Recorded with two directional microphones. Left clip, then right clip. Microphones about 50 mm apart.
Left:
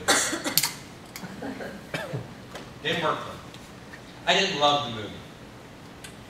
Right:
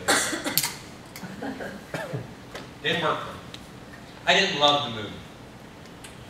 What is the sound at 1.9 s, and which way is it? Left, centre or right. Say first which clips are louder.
Cough: even; centre.